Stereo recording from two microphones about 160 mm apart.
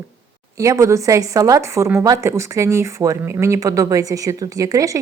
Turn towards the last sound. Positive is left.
turn(degrees=-20)  # may be behind; listen again after turning